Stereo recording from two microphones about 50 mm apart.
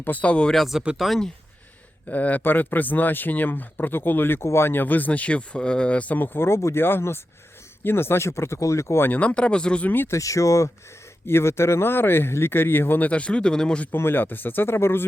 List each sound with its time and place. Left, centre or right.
0.0 s speech: left
0.5 s speech: centre
2.0 s speech: left
2.4 s speech: left
4.4 s speech: left
4.7 s speech: left
6.1 s speech: left
9.1 s speech: left
9.8 s speech: left
10.1 s speech: left
11.3 s speech: left
13.0 s speech: left
13.9 s speech: left